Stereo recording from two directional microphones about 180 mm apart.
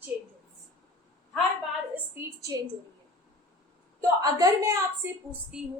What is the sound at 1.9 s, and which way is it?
Speech, 15° right (ahead or behind).